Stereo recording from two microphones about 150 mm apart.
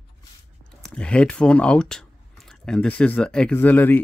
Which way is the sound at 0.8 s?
5° left (ahead or behind).